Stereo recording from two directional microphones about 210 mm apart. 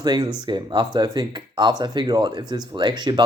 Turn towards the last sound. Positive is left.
turn(degrees=-20)  # may be behind; listen again after turning